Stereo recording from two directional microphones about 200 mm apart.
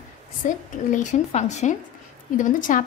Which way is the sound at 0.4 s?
40° left (ahead or behind).